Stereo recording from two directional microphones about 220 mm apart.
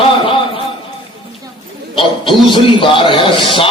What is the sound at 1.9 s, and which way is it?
A man's voice, 25° left (ahead or behind).